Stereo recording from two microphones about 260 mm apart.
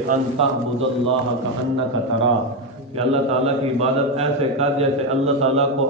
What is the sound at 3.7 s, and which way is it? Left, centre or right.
A man's voice, right.